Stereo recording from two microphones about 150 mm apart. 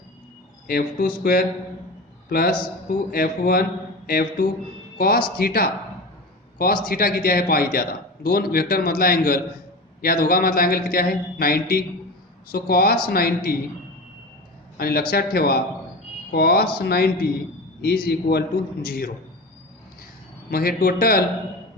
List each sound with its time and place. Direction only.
0.7 s a man's voice: 90° left
4.9 s a man's voice: 90° left
6.8 s a man's voice: 85° left
14.8 s a man's voice: 90° left
20.5 s a man's voice: 80° left